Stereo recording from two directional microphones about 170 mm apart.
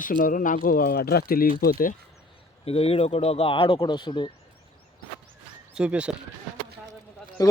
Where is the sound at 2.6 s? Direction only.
35° left (ahead or behind).